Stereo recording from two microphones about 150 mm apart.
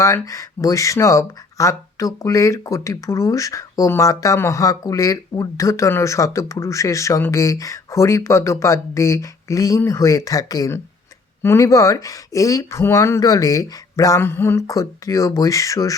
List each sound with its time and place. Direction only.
0.0 s speech: 20° left (ahead or behind)